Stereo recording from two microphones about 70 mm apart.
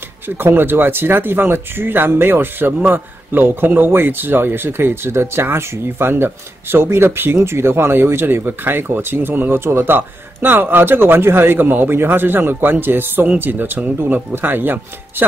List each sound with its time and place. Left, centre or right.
0.4 s speech: right